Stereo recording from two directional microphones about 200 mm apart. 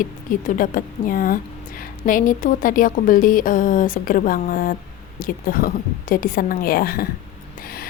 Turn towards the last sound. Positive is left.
turn(degrees=50)  # may be behind; listen again after turning